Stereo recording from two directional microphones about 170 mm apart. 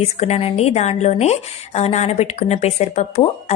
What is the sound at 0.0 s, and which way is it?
Speech, 40° left (ahead or behind).